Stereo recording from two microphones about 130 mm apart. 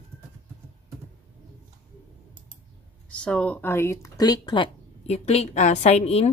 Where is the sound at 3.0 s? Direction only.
10° left (ahead or behind); by 4.7 s 40° left (ahead or behind).